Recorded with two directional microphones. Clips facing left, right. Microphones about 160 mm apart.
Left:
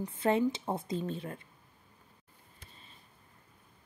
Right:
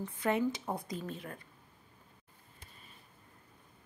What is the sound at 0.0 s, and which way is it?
Speech, 25° left (ahead or behind).